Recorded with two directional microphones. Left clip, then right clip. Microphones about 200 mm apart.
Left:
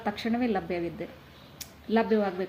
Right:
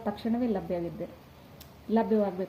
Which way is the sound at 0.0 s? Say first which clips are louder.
Left 2 dB; 10° left (ahead or behind).